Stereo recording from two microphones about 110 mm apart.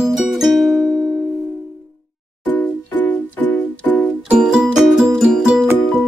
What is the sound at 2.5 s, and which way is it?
Music, 15° left (ahead or behind).